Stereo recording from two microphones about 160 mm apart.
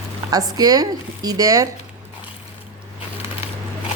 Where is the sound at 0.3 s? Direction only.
25° right (ahead or behind).